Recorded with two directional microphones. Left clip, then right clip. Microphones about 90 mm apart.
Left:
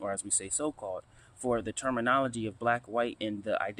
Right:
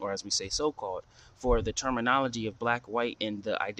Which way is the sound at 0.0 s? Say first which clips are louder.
Right 3 dB; 40° right (ahead or behind).